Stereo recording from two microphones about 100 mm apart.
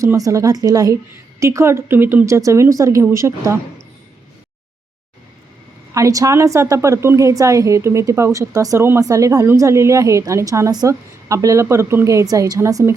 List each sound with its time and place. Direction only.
0.0 s a woman's voice: 30° right (ahead or behind)
5.9 s a woman's voice: 35° right (ahead or behind)